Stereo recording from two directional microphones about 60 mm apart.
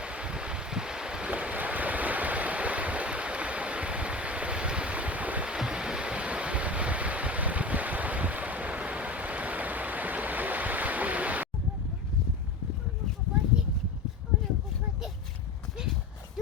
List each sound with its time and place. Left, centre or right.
0.0 s wind: centre
5.5 s waves: centre